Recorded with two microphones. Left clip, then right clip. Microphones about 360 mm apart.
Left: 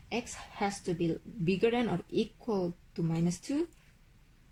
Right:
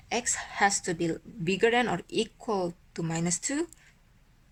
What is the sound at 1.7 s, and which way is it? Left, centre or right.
Speech, right.